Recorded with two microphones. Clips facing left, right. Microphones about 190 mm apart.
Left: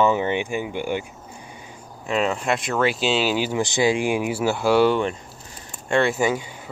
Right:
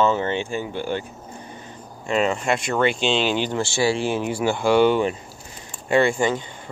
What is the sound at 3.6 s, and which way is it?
Speech, 15° left (ahead or behind).